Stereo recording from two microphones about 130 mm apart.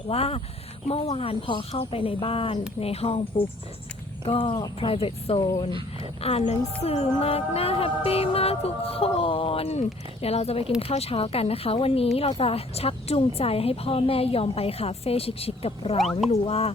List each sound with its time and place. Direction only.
0.1 s speech: 50° left (ahead or behind)
6.2 s speech: 55° left (ahead or behind)